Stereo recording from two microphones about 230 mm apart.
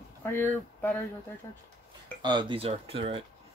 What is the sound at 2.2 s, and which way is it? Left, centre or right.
Speech, centre.